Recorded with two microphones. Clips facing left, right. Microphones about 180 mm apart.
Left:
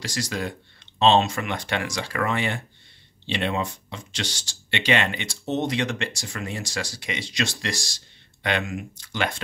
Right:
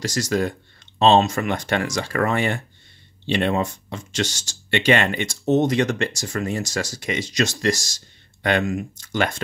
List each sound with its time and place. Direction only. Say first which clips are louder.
0.0 s speech: right 7 dB; 45° right (ahead or behind)